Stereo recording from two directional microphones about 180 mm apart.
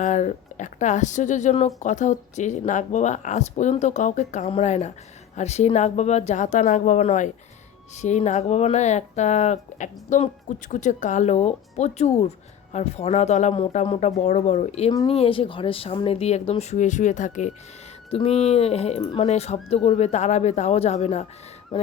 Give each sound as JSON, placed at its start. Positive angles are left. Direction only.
{"t": 0.0, "sound": "speech", "side_deg": 40}